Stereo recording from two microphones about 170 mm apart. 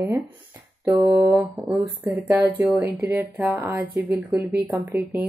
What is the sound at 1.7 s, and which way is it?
Speech, 10° right (ahead or behind).